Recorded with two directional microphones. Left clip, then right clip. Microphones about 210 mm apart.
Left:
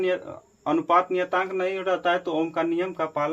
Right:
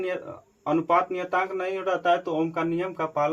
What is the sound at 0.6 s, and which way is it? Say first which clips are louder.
Speech: left 1 dB; 30° left (ahead or behind).